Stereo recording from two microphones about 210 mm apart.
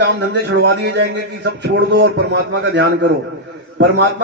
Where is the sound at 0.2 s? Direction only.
55° right (ahead or behind).